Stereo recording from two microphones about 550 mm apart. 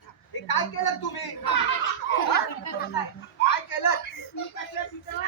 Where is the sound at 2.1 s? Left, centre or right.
Centre.